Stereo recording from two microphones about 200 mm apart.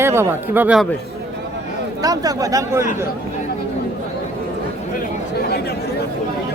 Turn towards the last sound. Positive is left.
turn(degrees=55)  # may be behind; listen again after turning